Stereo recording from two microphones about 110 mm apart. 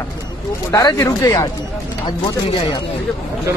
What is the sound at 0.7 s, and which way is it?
Speech, 30° left (ahead or behind).